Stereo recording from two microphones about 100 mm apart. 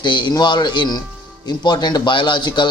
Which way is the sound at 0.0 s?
50° left (ahead or behind).